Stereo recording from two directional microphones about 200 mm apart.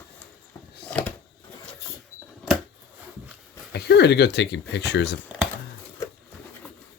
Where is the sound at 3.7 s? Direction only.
55° left (ahead or behind).